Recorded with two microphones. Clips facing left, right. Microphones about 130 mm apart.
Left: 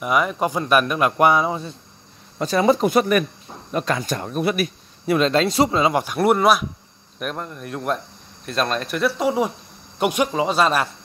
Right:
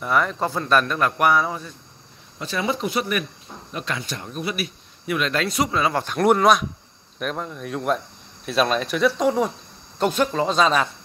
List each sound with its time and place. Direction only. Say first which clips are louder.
0.0 s speech: left 2 dB; 10° left (ahead or behind)
2.3 s speech: left 8 dB; 40° left (ahead or behind)
5.0 s speech: left 6 dB; 30° left (ahead or behind)
6.0 s speech: right 4 dB; 5° left (ahead or behind)